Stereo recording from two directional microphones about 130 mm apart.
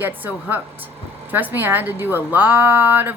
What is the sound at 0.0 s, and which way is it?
A woman's voice, 15° right (ahead or behind).